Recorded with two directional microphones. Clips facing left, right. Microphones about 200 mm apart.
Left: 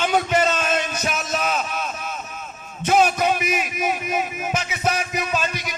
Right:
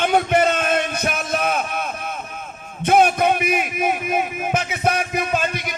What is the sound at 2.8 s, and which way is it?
Music, 55° right (ahead or behind).